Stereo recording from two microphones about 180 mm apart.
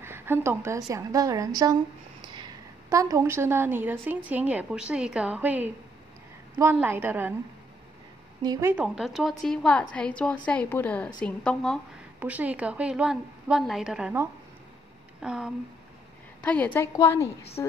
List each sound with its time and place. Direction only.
0.0 s a woman's voice: 10° right (ahead or behind)
2.9 s a woman's voice: 20° right (ahead or behind)
8.4 s a woman's voice: 20° right (ahead or behind); by 11.8 s 5° left (ahead or behind)
12.2 s a woman's voice: 10° right (ahead or behind)
15.2 s a woman's voice: 5° right (ahead or behind)
16.4 s a woman's voice: 10° left (ahead or behind)